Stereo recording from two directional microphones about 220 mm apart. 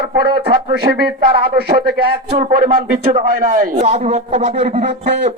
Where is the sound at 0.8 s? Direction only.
45° right (ahead or behind).